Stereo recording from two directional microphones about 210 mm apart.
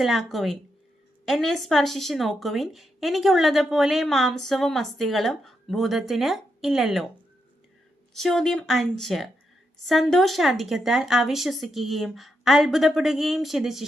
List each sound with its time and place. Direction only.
0.0 s speech: centre (ahead or behind)
8.1 s speech: centre (ahead or behind)